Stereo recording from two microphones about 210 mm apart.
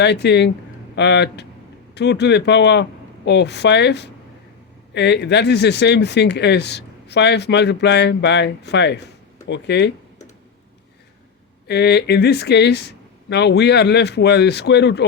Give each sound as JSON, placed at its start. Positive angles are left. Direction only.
{"t": 0.0, "sound": "speech", "side_deg": 55}
{"t": 11.7, "sound": "speech", "side_deg": 50}